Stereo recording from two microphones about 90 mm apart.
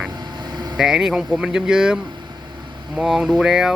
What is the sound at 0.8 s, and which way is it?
Speech, 5° right (ahead or behind).